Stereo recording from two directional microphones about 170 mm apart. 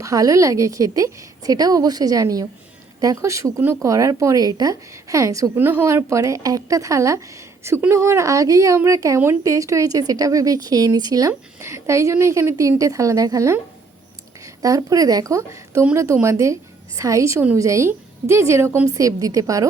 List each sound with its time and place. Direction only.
0.0 s a woman's voice: 20° right (ahead or behind)